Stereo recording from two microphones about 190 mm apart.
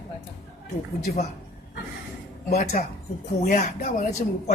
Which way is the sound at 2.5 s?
50° left (ahead or behind).